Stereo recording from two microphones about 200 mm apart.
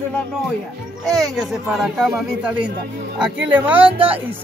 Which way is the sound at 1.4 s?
Centre (ahead or behind).